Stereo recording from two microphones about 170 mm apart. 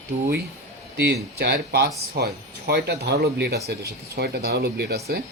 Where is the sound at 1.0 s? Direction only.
70° right (ahead or behind).